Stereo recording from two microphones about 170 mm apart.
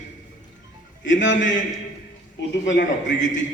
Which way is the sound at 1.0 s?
90° left.